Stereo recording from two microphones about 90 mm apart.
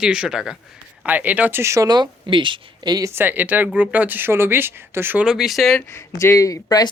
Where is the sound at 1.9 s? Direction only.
60° right (ahead or behind).